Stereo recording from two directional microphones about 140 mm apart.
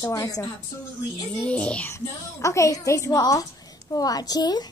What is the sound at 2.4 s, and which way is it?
A woman's voice, 20° left (ahead or behind).